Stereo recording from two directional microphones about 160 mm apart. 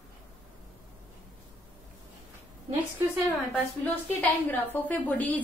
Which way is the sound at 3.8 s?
10° left (ahead or behind).